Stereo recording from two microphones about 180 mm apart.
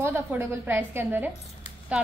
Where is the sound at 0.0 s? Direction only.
10° right (ahead or behind).